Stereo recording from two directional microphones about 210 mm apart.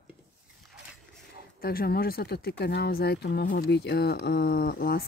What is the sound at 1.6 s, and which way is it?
Speech, 45° left (ahead or behind).